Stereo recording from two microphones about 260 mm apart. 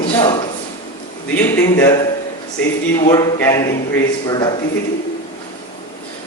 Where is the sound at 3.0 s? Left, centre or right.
Centre.